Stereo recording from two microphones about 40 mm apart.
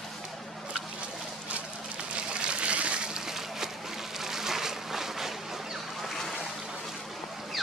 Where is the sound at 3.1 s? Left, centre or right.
Centre.